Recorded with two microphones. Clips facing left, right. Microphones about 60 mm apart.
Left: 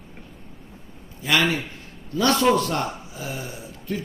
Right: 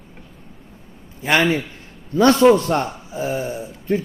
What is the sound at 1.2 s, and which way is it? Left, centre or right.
A man's voice, right.